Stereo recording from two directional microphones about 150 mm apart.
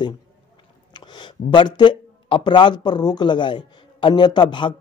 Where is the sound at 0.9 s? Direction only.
30° left (ahead or behind).